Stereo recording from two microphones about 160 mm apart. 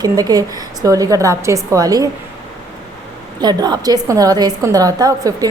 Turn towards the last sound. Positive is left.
turn(degrees=-20)  # may be behind; listen again after turning